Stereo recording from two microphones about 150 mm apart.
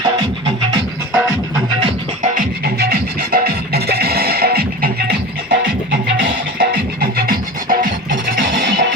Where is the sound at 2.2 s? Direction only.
65° right (ahead or behind).